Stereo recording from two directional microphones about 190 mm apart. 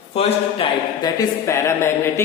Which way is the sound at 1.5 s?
15° left (ahead or behind).